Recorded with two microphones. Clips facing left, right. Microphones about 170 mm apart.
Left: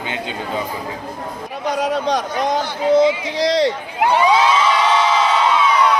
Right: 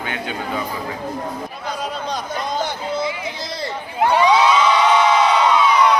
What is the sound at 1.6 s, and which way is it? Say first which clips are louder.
A man's voice: left 9 dB; 90° left.